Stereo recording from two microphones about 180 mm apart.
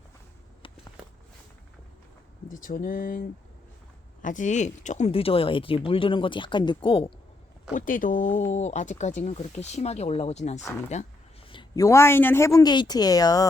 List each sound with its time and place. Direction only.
2.5 s speech: 50° left (ahead or behind); by 7.1 s 30° left (ahead or behind)
7.7 s speech: 45° left (ahead or behind)
11.4 s a woman's voice: 25° left (ahead or behind)